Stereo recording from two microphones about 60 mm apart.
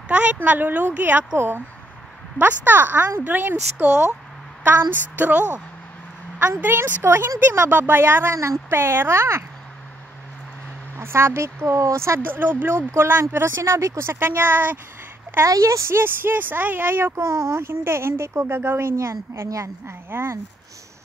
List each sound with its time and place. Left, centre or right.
0.1 s a woman's voice: right
6.4 s a woman's voice: right
11.0 s speech: right
12.3 s a woman's voice: right
15.4 s speech: right
16.0 s a woman's voice: right
17.2 s speech: right
18.9 s speech: right
19.9 s a woman's voice: right